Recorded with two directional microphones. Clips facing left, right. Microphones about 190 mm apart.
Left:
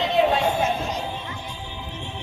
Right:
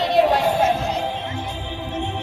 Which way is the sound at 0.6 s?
65° right (ahead or behind).